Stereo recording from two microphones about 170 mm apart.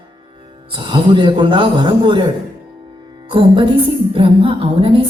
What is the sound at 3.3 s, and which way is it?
A man's voice, 30° right (ahead or behind).